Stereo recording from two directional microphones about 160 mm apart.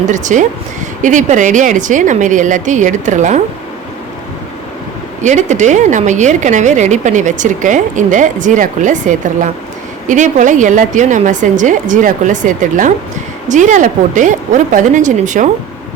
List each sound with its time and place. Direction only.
0.1 s a woman's voice: 50° right (ahead or behind)
5.2 s a woman's voice: 50° right (ahead or behind)